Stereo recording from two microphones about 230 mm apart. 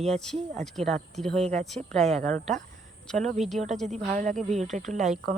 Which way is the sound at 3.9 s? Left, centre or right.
Right.